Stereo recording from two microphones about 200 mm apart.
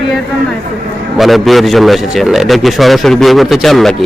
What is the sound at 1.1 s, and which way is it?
A man's voice, centre (ahead or behind).